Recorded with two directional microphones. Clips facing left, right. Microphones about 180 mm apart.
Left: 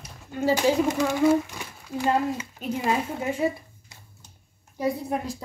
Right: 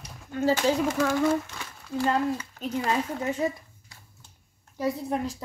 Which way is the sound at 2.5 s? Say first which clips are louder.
Left 3 dB; 10° left (ahead or behind).